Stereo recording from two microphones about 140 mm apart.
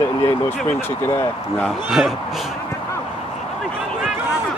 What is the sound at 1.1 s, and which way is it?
Speech, 15° left (ahead or behind).